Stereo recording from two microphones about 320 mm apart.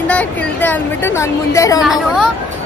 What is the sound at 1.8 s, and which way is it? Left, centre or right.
Speech, centre.